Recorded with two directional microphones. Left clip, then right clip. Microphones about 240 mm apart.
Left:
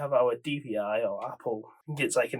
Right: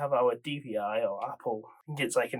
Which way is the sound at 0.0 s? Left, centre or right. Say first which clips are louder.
Left 1 dB; centre.